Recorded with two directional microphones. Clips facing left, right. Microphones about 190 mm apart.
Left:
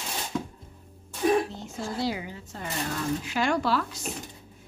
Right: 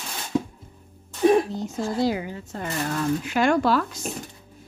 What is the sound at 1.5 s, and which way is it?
Speech, 40° right (ahead or behind).